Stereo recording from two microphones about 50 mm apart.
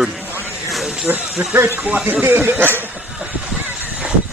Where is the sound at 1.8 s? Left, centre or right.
Right.